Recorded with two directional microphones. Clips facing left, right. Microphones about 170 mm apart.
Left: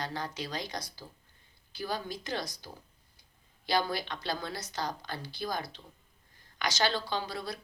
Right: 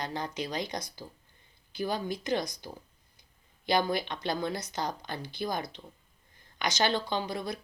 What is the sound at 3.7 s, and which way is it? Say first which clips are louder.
Speech: right 3 dB; 20° right (ahead or behind).